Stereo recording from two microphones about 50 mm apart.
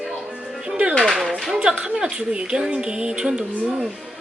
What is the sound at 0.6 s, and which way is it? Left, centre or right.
Speech, right.